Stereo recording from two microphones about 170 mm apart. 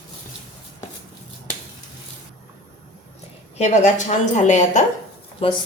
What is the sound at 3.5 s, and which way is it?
A woman's voice, 40° left (ahead or behind).